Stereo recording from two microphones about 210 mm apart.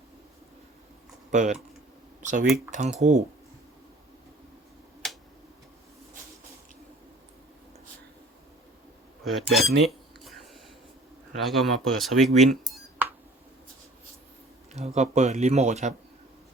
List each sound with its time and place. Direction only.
1.3 s speech: 35° right (ahead or behind)
5.0 s tick-tock: centre (ahead or behind)
9.2 s speech: centre (ahead or behind)
10.2 s a sound: centre (ahead or behind)
11.4 s speech: centre (ahead or behind)
14.7 s speech: 30° right (ahead or behind)